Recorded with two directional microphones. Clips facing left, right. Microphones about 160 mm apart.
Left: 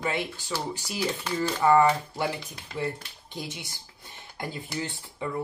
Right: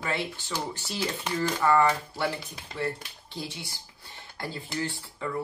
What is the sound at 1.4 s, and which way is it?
Speech, 15° left (ahead or behind).